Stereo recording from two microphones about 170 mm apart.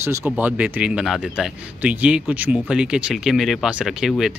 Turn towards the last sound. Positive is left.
turn(degrees=0)  # may be behind; listen again after turning